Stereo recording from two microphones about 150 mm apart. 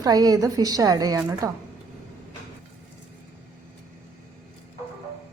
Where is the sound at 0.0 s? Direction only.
25° right (ahead or behind).